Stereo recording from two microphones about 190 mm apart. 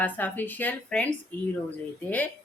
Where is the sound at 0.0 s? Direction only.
10° left (ahead or behind).